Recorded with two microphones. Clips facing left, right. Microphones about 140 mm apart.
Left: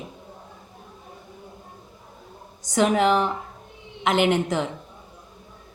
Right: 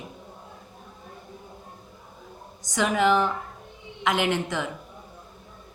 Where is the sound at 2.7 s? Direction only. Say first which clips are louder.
Left 2 dB; 30° left (ahead or behind).